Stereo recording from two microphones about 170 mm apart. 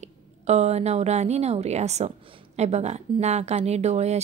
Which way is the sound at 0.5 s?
40° right (ahead or behind).